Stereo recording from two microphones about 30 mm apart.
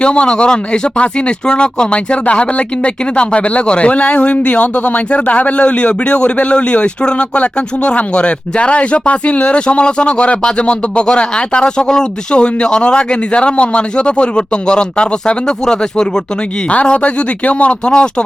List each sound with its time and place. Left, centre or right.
0.0 s a man's voice: left
2.2 s a man's voice: left
17.0 s a man's voice: left